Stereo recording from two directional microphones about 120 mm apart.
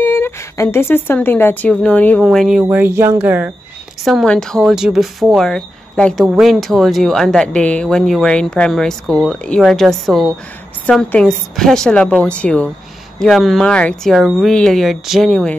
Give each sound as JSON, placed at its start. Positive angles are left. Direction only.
{"t": 0.0, "sound": "speech", "side_deg": 20}
{"t": 2.2, "sound": "speech", "side_deg": -5}
{"t": 2.6, "sound": "speech", "side_deg": -15}
{"t": 4.0, "sound": "a woman's voice", "side_deg": 0}
{"t": 14.1, "sound": "speech", "side_deg": 0}